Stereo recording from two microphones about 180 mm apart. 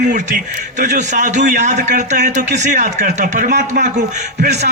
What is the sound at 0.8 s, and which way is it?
A man's voice, 45° right (ahead or behind).